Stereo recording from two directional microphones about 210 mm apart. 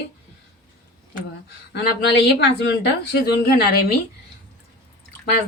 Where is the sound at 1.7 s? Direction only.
50° left (ahead or behind).